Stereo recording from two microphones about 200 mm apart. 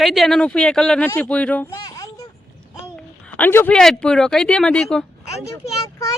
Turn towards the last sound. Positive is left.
turn(degrees=15)  # may be behind; listen again after turning